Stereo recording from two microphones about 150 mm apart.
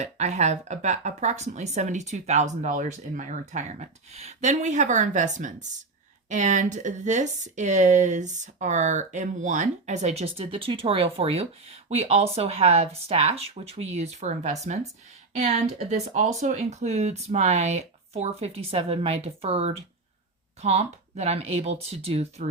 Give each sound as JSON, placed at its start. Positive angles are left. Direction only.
{"t": 0.0, "sound": "speech", "side_deg": -50}